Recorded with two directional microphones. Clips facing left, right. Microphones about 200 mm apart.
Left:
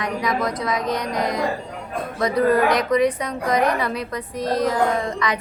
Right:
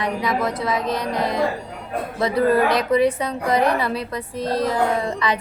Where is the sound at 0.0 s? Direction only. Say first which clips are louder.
Right 1 dB; 30° right (ahead or behind).